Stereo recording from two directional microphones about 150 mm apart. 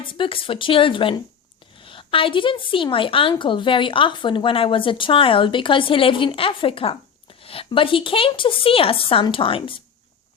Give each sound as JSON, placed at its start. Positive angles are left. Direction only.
{"t": 0.0, "sound": "a woman's voice", "side_deg": 35}